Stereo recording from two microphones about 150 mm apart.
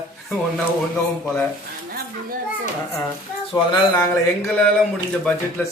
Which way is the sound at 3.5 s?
30° left (ahead or behind).